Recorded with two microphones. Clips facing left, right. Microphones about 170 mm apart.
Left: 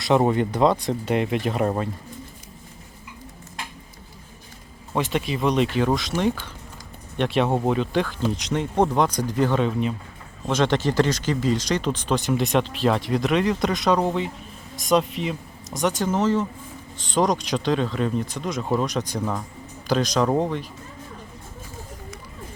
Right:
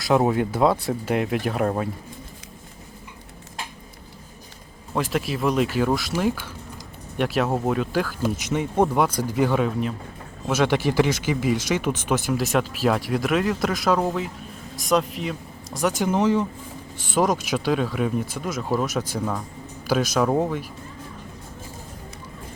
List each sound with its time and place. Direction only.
0.0 s speech: centre (ahead or behind)
4.9 s speech: centre (ahead or behind)